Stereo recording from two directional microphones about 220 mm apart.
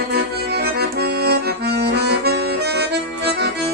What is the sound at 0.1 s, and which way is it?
Accordion, 45° right (ahead or behind).